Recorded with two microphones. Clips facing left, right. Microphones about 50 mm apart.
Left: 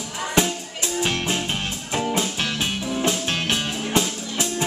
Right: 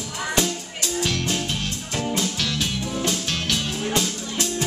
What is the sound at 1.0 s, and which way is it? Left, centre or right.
Music, left.